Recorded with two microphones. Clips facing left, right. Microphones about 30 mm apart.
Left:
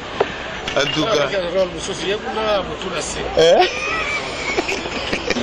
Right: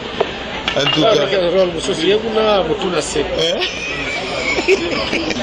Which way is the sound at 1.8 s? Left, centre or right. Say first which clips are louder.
Right 7 dB; right.